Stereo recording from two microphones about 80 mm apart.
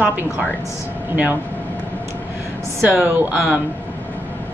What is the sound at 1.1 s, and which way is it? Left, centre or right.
Speech, right.